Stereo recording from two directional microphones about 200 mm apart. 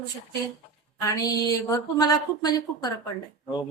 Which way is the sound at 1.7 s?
20° left (ahead or behind).